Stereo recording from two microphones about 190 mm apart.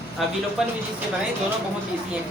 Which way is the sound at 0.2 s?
Centre (ahead or behind).